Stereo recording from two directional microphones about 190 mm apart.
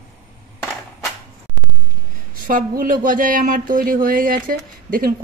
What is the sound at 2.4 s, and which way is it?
Speech, 50° right (ahead or behind).